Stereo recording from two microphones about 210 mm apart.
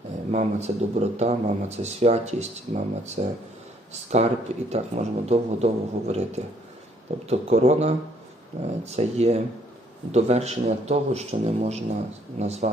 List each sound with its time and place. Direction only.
0.3 s speech: 30° right (ahead or behind)